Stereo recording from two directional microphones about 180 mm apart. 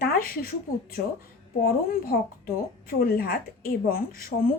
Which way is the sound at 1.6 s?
55° left (ahead or behind).